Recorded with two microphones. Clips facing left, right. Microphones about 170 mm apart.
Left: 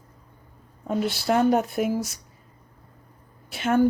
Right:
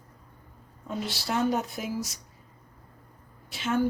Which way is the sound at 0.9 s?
55° left (ahead or behind).